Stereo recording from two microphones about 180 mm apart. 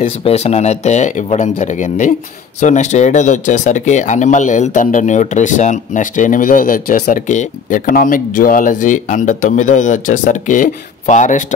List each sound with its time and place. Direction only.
0.2 s speech: 35° left (ahead or behind)